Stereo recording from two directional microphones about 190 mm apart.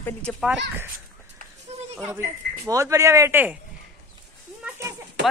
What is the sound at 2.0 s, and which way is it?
Speech, 15° right (ahead or behind).